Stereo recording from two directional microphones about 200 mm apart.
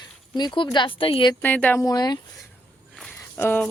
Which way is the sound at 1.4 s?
10° left (ahead or behind).